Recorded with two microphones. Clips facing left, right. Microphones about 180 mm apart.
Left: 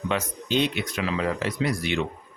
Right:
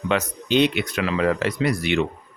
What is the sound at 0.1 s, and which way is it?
Speech, 70° right (ahead or behind).